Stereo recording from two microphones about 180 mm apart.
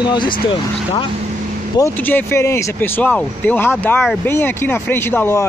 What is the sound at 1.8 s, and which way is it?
Speech, 10° left (ahead or behind).